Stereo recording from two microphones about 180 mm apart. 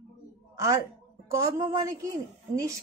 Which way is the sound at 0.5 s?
15° right (ahead or behind).